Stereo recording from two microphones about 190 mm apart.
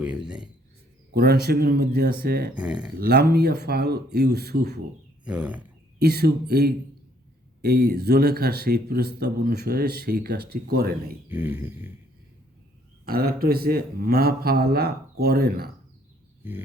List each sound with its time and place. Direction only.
0.0 s speech: 5° right (ahead or behind)
1.1 s a man's voice: 55° right (ahead or behind)
2.6 s speech: 5° right (ahead or behind)
3.0 s a man's voice: 55° right (ahead or behind)
5.2 s speech: 5° right (ahead or behind)
6.0 s a man's voice: 55° right (ahead or behind)
11.3 s a sound: 10° right (ahead or behind)
13.1 s a man's voice: 50° right (ahead or behind)